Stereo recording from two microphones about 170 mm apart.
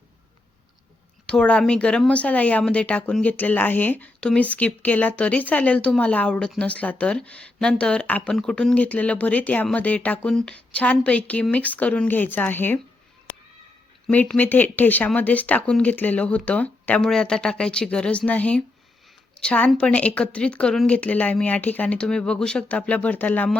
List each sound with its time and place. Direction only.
1.3 s speech: 5° left (ahead or behind)
14.1 s a woman's voice: 10° left (ahead or behind)